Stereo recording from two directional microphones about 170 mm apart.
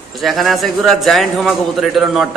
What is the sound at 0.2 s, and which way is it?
A man's voice, centre (ahead or behind).